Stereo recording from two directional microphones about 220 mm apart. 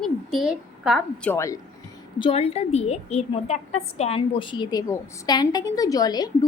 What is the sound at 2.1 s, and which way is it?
A woman's voice, 25° left (ahead or behind).